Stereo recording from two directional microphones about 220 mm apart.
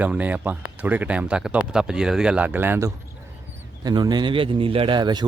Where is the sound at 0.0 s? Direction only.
5° right (ahead or behind).